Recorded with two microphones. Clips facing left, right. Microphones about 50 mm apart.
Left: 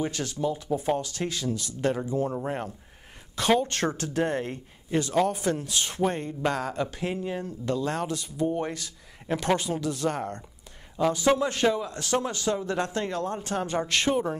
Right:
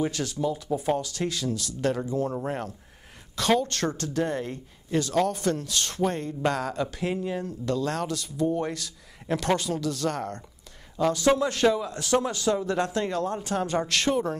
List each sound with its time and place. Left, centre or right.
0.0 s speech: centre